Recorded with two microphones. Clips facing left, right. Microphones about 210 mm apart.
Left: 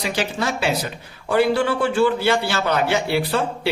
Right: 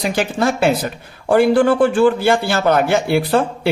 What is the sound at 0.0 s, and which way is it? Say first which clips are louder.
A man's voice: right 6 dB; 50° right (ahead or behind).